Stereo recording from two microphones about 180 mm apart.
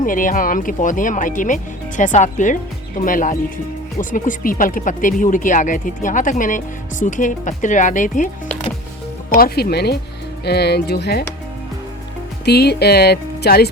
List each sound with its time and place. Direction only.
0.0 s speech: 50° left (ahead or behind)
9.3 s speech: 55° left (ahead or behind)
12.5 s speech: 65° left (ahead or behind)